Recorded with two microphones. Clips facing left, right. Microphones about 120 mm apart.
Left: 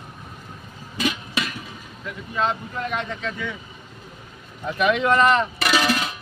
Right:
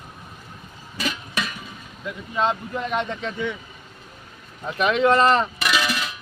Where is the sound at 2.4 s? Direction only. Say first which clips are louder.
Right 1 dB; 20° right (ahead or behind).